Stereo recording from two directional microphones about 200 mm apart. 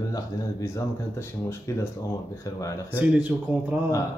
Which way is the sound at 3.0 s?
10° right (ahead or behind).